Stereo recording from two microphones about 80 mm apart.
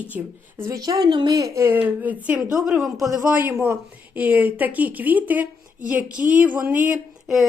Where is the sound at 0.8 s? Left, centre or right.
Right.